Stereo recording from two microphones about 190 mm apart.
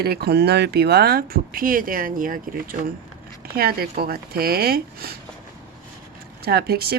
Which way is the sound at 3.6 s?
55° right (ahead or behind).